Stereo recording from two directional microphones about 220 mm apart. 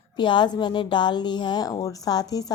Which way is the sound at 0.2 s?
20° left (ahead or behind).